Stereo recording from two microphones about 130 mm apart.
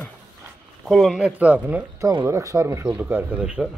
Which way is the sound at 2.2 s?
25° right (ahead or behind).